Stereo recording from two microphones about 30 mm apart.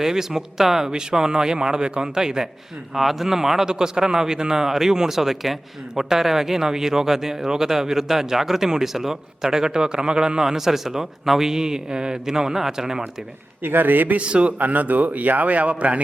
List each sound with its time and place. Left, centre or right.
0.0 s speech: centre
0.9 s a man's voice: right
2.9 s speech: centre
3.7 s a man's voice: right
10.4 s speech: centre
13.7 s speech: right
14.2 s a man's voice: right
14.6 s speech: right